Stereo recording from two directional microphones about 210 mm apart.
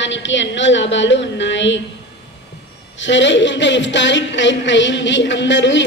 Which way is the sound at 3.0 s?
60° left (ahead or behind).